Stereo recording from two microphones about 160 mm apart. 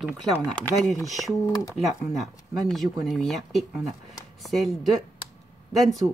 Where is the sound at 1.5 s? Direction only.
20° left (ahead or behind).